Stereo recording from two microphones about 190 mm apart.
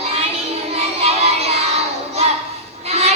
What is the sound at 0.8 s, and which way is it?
Music, 35° right (ahead or behind).